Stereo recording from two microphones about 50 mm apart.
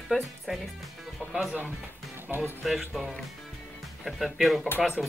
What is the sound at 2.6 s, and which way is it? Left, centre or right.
Speech, centre.